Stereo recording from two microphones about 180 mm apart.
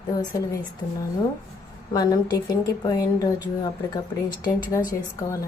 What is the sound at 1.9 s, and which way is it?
A woman's voice, 20° left (ahead or behind).